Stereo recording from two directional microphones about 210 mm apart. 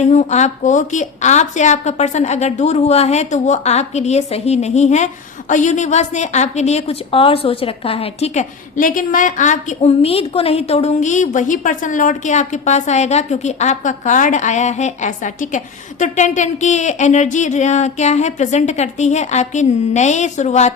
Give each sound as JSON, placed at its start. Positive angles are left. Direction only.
{"t": 0.0, "sound": "a woman's voice", "side_deg": 35}